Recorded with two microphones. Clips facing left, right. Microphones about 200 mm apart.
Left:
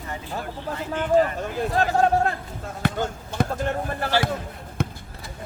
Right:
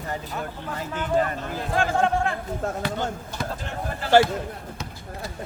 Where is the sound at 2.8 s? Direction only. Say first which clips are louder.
Left 2 dB; 55° left (ahead or behind).